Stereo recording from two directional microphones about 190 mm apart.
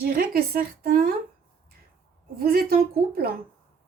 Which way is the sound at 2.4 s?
50° right (ahead or behind).